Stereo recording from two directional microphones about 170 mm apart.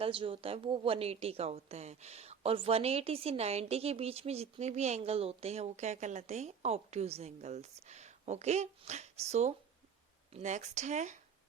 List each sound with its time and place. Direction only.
0.0 s a woman's voice: 30° right (ahead or behind)